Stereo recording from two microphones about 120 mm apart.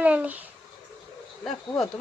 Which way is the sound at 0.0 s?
10° right (ahead or behind).